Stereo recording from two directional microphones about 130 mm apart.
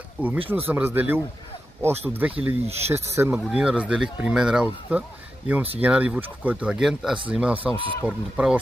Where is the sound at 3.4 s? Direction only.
5° right (ahead or behind).